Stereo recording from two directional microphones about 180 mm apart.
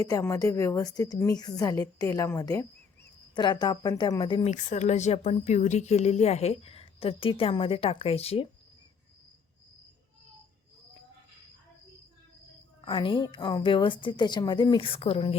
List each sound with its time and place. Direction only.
0.0 s a woman's voice: 20° left (ahead or behind)
4.5 s speech: 40° left (ahead or behind)
12.8 s a woman's voice: 25° left (ahead or behind)